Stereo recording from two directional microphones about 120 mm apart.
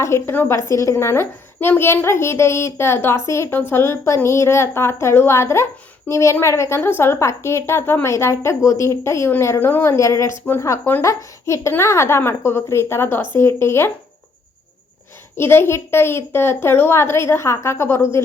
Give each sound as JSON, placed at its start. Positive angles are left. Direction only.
{"t": 0.0, "sound": "a woman's voice", "side_deg": 20}
{"t": 15.4, "sound": "a woman's voice", "side_deg": 20}